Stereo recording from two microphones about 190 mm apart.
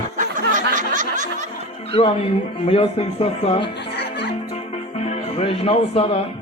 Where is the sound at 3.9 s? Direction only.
60° left (ahead or behind).